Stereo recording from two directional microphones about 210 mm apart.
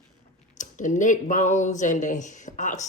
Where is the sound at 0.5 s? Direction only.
35° left (ahead or behind).